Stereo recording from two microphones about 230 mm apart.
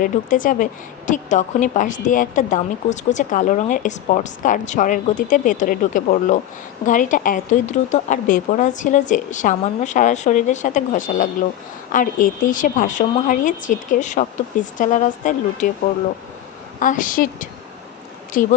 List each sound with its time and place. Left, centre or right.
0.0 s a woman's voice: left
16.8 s a woman's voice: left